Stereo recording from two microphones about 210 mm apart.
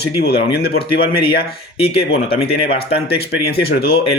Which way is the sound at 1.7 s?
25° left (ahead or behind).